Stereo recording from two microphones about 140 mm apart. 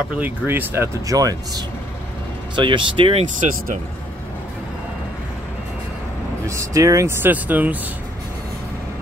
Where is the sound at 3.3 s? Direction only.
65° right (ahead or behind).